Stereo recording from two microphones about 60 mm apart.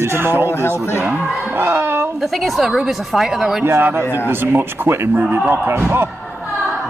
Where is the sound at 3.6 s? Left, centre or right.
Right.